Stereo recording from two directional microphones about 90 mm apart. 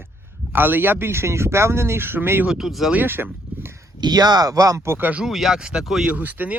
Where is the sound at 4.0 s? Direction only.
50° right (ahead or behind); by 5.1 s 30° right (ahead or behind).